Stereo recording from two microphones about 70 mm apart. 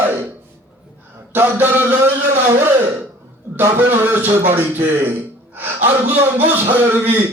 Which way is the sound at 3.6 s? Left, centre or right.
Right.